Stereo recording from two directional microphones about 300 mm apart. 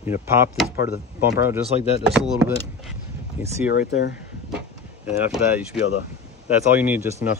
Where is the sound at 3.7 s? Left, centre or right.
Left.